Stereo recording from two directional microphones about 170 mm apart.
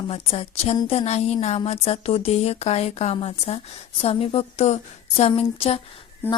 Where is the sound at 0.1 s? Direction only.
35° left (ahead or behind).